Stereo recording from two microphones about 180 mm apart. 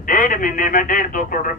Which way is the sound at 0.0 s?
50° left (ahead or behind).